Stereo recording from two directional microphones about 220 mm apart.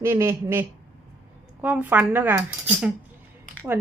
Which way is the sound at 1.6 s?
10° right (ahead or behind).